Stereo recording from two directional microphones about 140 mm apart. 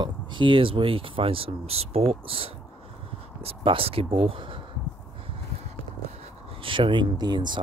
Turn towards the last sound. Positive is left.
turn(degrees=-30)  # may be behind; listen again after turning